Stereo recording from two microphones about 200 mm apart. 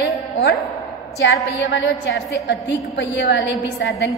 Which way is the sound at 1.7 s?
60° left (ahead or behind).